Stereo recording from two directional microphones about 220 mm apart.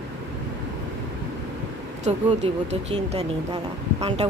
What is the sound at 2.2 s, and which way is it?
Speech, 30° right (ahead or behind).